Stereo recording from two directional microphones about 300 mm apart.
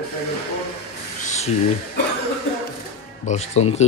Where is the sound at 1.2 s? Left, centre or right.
Left.